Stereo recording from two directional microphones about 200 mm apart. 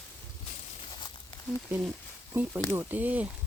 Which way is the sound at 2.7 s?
10° right (ahead or behind).